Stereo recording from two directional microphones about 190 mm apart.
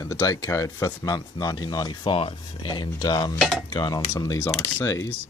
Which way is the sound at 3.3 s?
Centre (ahead or behind).